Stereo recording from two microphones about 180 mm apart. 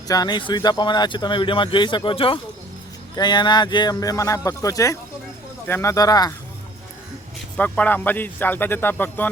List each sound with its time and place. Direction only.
0.1 s speech: 25° left (ahead or behind)
7.5 s speech: 10° left (ahead or behind)